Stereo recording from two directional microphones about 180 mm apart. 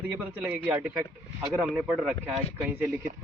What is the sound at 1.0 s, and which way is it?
Speech, 20° right (ahead or behind).